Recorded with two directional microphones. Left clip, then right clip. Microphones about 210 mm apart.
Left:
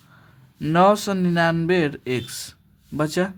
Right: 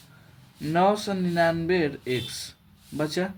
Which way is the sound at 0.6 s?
40° left (ahead or behind).